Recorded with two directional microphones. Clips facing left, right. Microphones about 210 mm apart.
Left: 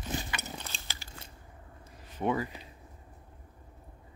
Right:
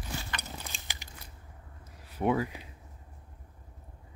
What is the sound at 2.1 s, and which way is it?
Speech, 10° right (ahead or behind).